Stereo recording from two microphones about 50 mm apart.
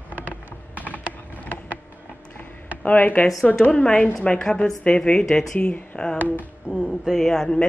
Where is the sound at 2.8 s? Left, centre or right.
Left.